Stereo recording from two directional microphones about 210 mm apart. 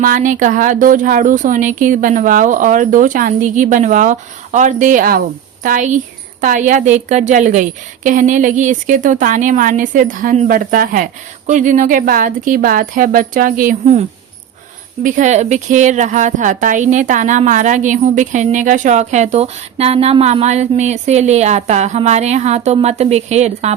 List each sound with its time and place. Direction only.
0.0 s speech: 40° right (ahead or behind)
15.0 s speech: 35° right (ahead or behind)